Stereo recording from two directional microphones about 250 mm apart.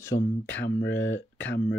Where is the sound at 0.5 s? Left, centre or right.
Left.